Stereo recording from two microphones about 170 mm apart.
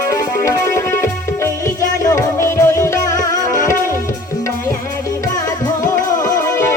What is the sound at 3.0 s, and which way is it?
Music, 50° left (ahead or behind).